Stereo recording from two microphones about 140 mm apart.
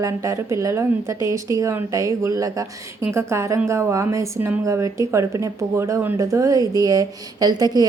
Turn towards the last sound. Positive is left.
turn(degrees=-25)  # may be behind; listen again after turning